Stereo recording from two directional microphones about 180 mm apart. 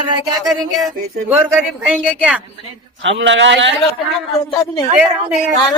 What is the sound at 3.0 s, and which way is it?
Speech, 90° right.